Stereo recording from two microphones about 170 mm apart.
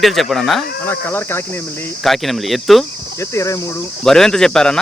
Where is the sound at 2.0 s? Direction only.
Centre (ahead or behind).